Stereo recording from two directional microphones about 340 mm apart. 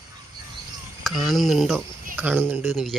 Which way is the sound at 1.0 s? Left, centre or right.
Centre.